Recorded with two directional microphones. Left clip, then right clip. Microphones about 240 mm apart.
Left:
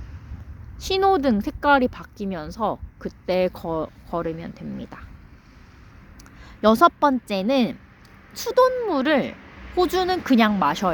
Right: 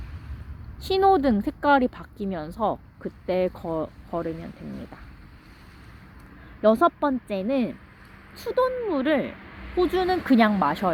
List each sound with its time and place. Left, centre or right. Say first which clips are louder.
0.8 s a woman's voice: even; centre; by 4.9 s left
6.6 s a woman's voice: left 4 dB; left
8.3 s speech: left 3 dB; left
8.9 s a woman's voice: left 3 dB; left
10.2 s a woman's voice: left 1 dB; centre